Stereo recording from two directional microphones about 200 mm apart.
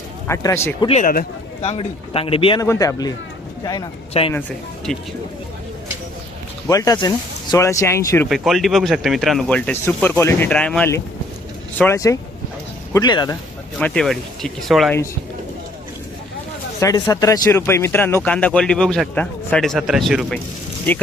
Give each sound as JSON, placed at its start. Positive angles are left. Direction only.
{"t": 0.3, "sound": "speech", "side_deg": 15}
{"t": 0.9, "sound": "speech", "side_deg": 40}
{"t": 1.6, "sound": "speech", "side_deg": 30}
{"t": 4.3, "sound": "speech", "side_deg": 10}
{"t": 6.7, "sound": "speech", "side_deg": 15}
{"t": 8.3, "sound": "speech", "side_deg": 0}
{"t": 13.7, "sound": "speech", "side_deg": 5}
{"t": 16.8, "sound": "speech", "side_deg": 15}